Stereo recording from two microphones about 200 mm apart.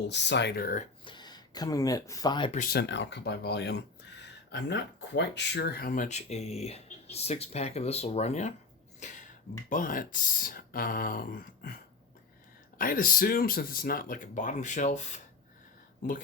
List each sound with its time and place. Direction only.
0.1 s speech: 60° left (ahead or behind)
1.0 s speech: 20° left (ahead or behind)
2.6 s speech: 55° left (ahead or behind)
12.8 s speech: 45° left (ahead or behind)